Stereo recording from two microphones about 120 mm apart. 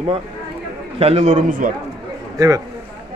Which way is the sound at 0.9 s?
55° right (ahead or behind).